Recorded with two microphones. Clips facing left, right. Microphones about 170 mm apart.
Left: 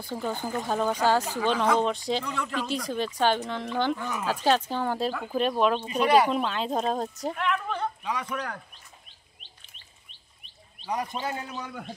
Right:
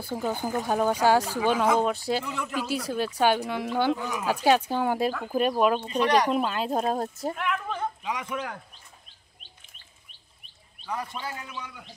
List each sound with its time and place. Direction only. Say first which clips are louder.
0.0 s speech: right 2 dB; 10° right (ahead or behind)
5.9 s speech: left 1 dB; 10° left (ahead or behind); by 8.4 s 10° right (ahead or behind)
10.9 s a man's voice: left 3 dB; 15° left (ahead or behind)
11.4 s a man's voice: left 4 dB; 45° left (ahead or behind)